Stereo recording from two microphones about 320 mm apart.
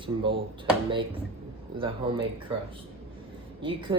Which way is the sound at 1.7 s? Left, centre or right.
Centre.